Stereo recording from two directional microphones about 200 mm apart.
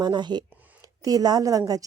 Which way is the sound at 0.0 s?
20° right (ahead or behind).